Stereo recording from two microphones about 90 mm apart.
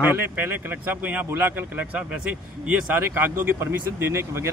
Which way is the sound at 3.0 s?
25° right (ahead or behind).